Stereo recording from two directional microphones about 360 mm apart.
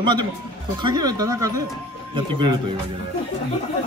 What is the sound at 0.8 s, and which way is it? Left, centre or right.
Speech, centre.